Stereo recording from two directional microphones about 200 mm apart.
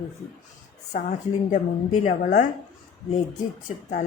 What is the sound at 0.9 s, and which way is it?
Speech, 35° left (ahead or behind).